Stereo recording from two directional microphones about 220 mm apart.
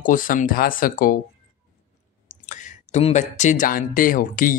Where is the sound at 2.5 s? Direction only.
35° left (ahead or behind).